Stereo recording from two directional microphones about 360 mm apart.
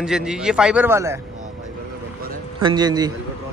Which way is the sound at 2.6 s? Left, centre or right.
Centre.